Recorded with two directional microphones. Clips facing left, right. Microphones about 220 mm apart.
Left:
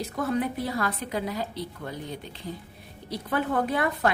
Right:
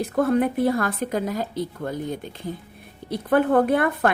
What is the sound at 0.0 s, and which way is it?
A woman's voice, 55° right (ahead or behind).